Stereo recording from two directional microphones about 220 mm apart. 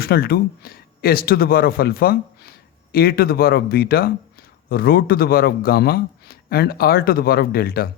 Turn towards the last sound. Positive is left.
turn(degrees=45)  # may be behind; listen again after turning